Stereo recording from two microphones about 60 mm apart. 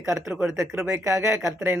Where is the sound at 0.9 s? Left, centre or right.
Right.